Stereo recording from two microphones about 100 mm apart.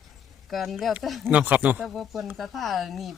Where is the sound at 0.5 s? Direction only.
Centre (ahead or behind).